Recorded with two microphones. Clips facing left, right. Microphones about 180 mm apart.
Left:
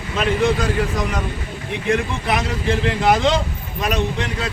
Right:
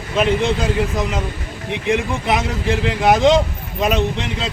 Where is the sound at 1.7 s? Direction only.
20° right (ahead or behind).